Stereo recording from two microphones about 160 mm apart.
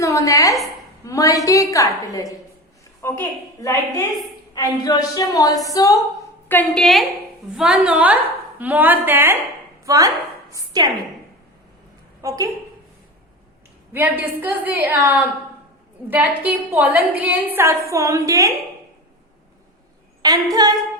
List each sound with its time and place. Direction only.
0.0 s a sound: 20° left (ahead or behind)
1.0 s a woman's voice: 20° left (ahead or behind)
6.5 s a woman's voice: 5° left (ahead or behind); by 10.9 s 25° right (ahead or behind)
12.2 s a woman's voice: 20° right (ahead or behind)
13.9 s a woman's voice: 10° right (ahead or behind)
20.2 s a woman's voice: 25° right (ahead or behind)